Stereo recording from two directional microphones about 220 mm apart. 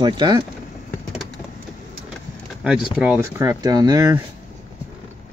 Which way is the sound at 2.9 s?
5° right (ahead or behind).